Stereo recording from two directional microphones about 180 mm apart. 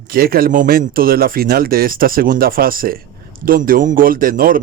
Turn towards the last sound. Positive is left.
turn(degrees=-50)  # may be behind; listen again after turning